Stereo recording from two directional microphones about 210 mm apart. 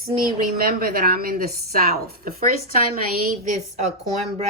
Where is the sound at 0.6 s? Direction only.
45° right (ahead or behind).